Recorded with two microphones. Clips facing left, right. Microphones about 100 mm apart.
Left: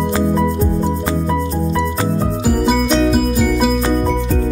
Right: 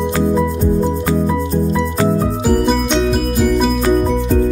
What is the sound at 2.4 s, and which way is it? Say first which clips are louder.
Music: even; 5° left (ahead or behind).